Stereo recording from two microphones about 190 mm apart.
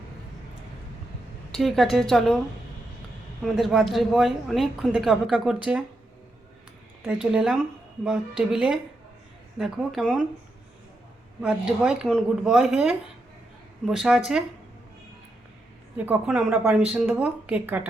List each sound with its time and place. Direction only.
1.5 s a woman's voice: centre (ahead or behind)
3.4 s a woman's voice: centre (ahead or behind)
7.0 s a woman's voice: 5° right (ahead or behind)
11.4 s a woman's voice: 5° right (ahead or behind)
16.0 s a woman's voice: 5° right (ahead or behind)